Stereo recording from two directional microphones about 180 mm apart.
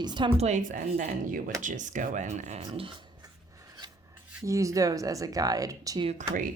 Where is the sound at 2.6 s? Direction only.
30° right (ahead or behind).